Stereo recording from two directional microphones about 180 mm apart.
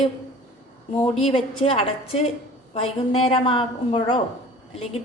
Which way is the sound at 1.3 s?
30° left (ahead or behind).